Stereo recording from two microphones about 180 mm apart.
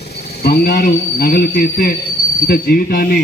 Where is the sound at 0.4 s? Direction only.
60° left (ahead or behind).